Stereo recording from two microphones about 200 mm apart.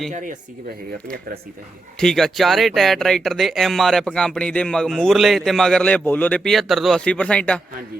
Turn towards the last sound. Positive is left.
turn(degrees=5)  # may be behind; listen again after turning